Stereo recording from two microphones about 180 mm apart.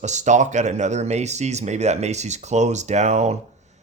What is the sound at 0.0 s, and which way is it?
Speech, 40° right (ahead or behind).